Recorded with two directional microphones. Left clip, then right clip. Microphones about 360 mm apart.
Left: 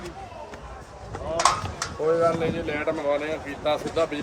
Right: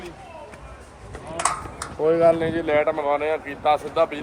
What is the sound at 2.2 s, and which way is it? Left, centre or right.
Speech, right.